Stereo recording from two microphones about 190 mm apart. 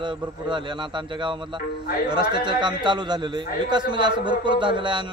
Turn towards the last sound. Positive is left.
turn(degrees=-25)  # may be behind; listen again after turning